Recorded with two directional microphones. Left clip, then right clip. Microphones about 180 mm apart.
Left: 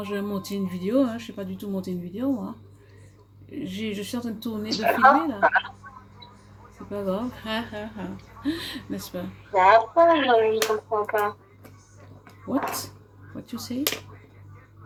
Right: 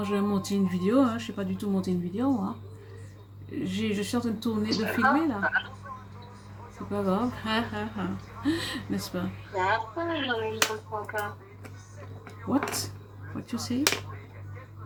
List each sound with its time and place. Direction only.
0.0 s speech: 5° right (ahead or behind)
3.6 s speech: 5° right (ahead or behind)
4.7 s speech: 35° left (ahead or behind)
6.9 s speech: 5° right (ahead or behind)
9.6 s speech: 40° left (ahead or behind)
13.4 s speech: centre (ahead or behind)